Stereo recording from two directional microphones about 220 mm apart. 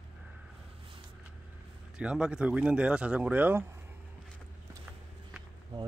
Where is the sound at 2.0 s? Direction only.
5° right (ahead or behind).